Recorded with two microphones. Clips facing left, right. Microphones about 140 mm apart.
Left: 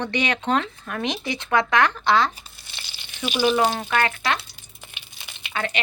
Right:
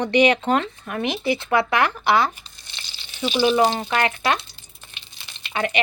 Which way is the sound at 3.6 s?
15° right (ahead or behind).